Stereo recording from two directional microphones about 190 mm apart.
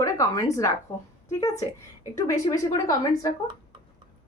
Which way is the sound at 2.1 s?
15° left (ahead or behind).